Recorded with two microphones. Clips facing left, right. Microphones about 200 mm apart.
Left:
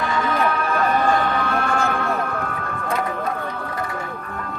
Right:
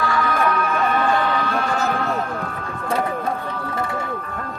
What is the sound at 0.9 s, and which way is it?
Music, 50° left (ahead or behind).